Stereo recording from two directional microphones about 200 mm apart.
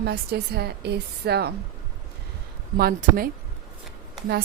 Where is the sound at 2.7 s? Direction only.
50° right (ahead or behind).